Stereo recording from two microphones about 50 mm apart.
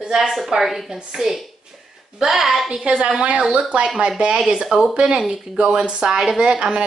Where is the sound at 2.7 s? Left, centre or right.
Centre.